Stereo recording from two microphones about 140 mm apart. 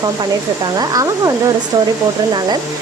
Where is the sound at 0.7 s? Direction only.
25° right (ahead or behind).